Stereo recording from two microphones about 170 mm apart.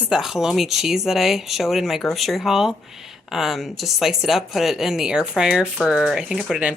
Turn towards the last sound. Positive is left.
turn(degrees=0)  # may be behind; listen again after turning